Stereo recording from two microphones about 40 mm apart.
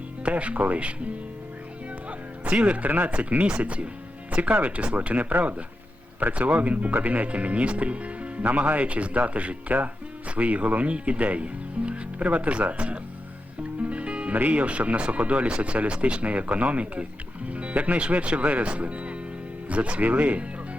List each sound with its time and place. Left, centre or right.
0.2 s speech: right
2.0 s music: right
3.4 s speech: right
13.9 s music: right
14.3 s speech: right